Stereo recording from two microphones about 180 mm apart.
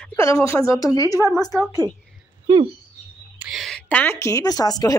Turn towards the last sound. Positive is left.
turn(degrees=20)  # may be behind; listen again after turning